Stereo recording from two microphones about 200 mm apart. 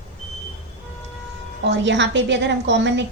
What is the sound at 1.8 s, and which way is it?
A woman's voice, 65° right (ahead or behind).